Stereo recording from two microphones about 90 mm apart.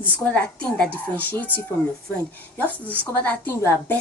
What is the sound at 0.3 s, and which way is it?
Speech, 15° left (ahead or behind).